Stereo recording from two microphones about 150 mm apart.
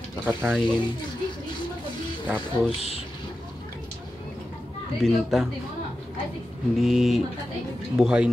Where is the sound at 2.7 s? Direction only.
40° left (ahead or behind).